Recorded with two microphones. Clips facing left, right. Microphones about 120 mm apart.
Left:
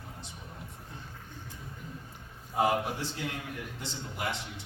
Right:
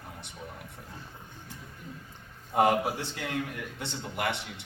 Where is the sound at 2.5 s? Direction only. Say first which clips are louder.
Right 4 dB; 65° right (ahead or behind).